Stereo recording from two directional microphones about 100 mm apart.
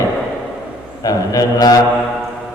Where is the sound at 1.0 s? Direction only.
40° left (ahead or behind).